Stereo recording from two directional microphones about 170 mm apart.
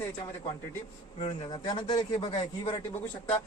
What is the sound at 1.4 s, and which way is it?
A man's voice, 30° left (ahead or behind).